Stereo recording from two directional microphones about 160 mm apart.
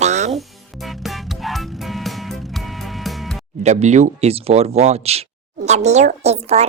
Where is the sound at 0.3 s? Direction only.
Centre (ahead or behind).